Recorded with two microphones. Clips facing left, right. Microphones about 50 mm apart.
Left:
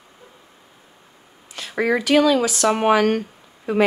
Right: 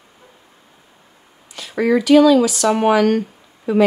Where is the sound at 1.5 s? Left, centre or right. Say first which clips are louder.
Right 4 dB; left.